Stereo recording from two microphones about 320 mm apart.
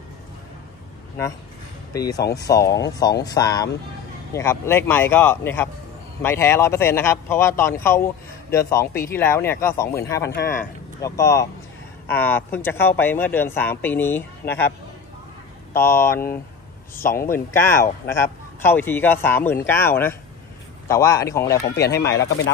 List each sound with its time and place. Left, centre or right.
2.0 s speech: centre
10.3 s speech: left
11.0 s speech: centre
15.7 s speech: centre
17.3 s speech: centre
21.6 s speech: left